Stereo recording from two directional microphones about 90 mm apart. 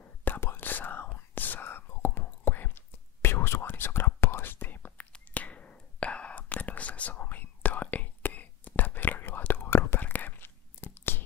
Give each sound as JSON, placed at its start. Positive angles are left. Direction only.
{"t": 0.0, "sound": "whispering", "side_deg": 20}